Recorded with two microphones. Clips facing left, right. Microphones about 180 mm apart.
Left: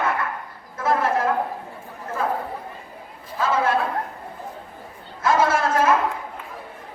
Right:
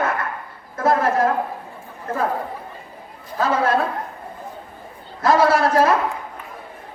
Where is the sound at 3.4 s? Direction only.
40° right (ahead or behind).